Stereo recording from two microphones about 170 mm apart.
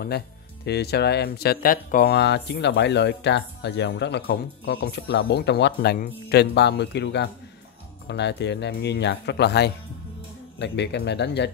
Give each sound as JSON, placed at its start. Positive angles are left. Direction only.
{"t": 0.7, "sound": "speech", "side_deg": 70}